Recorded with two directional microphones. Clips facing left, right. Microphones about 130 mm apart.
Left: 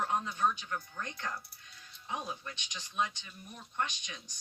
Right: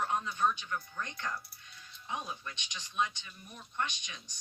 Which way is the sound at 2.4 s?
40° left (ahead or behind).